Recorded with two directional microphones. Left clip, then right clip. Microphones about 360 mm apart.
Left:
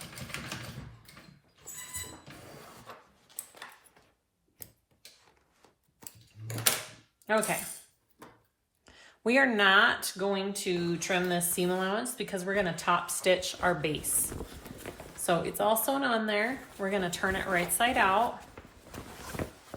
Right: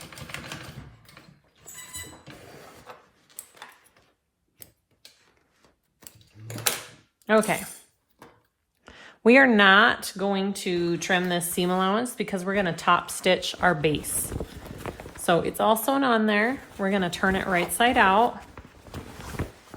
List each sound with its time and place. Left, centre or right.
7.3 s speech: right
8.8 s speech: right
19.4 s a sound: centre